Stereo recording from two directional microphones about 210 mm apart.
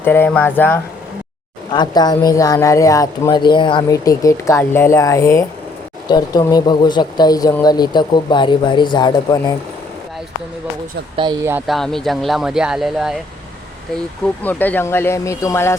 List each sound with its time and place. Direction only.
0.0 s speech: 10° left (ahead or behind)
1.7 s speech: 20° left (ahead or behind)
11.2 s speech: 20° right (ahead or behind)
11.5 s speech: centre (ahead or behind)
14.4 s speech: 10° left (ahead or behind)